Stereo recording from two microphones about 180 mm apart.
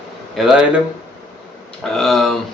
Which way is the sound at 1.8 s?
Centre (ahead or behind).